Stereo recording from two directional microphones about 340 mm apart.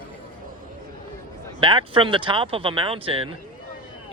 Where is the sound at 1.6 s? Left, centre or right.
Centre.